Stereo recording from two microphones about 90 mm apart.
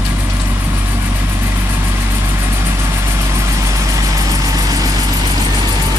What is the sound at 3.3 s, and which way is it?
Vehicle, 35° right (ahead or behind).